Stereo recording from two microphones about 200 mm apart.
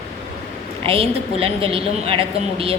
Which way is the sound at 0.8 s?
25° right (ahead or behind).